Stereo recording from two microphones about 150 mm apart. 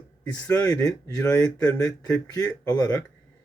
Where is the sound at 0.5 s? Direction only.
25° left (ahead or behind).